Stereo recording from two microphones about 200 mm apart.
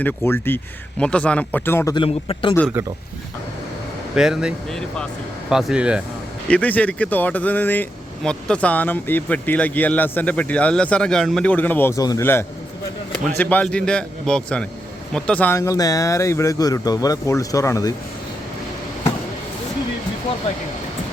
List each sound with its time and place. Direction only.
0.0 s speech: 10° left (ahead or behind)
2.0 s a man's voice: 25° left (ahead or behind)
4.1 s speech: 5° right (ahead or behind)
6.5 s speech: 5° left (ahead or behind)